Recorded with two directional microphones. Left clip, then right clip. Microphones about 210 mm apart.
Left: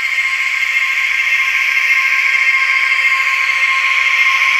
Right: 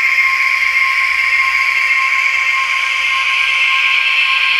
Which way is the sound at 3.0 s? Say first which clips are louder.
Left 1 dB; 40° left (ahead or behind).